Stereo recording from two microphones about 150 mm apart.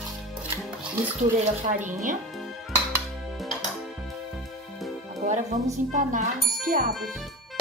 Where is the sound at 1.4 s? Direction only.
55° right (ahead or behind).